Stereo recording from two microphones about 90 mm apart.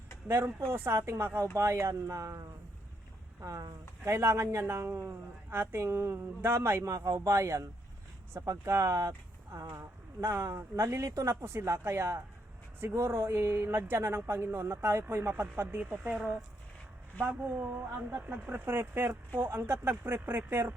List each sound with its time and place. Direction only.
0.3 s speech: 30° right (ahead or behind)
15.8 s speech: 15° right (ahead or behind)